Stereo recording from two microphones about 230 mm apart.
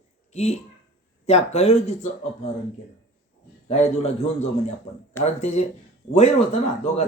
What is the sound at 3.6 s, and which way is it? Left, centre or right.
Speech, left.